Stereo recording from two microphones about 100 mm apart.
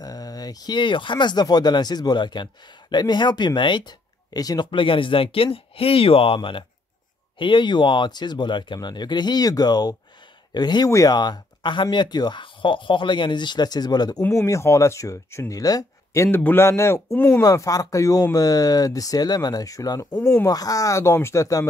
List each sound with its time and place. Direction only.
0.0 s speech: 40° left (ahead or behind)
4.6 s speech: 60° left (ahead or behind); by 14.2 s 40° left (ahead or behind)
14.3 s speech: 30° left (ahead or behind)